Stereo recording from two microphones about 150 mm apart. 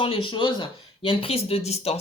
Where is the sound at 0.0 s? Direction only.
35° left (ahead or behind).